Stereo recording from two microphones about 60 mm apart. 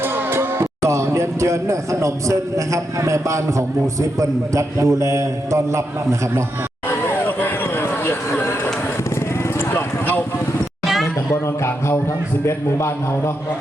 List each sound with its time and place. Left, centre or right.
0.0 s music: right
0.6 s a man's voice: right
6.8 s a sound: left
9.6 s vehicle: left
11.0 s a sound: left
12.5 s a man's voice: left